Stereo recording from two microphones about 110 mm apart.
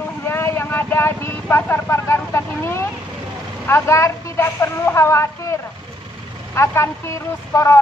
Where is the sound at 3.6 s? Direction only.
25° left (ahead or behind).